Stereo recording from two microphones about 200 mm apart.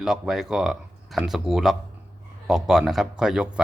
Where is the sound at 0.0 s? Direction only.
Centre (ahead or behind).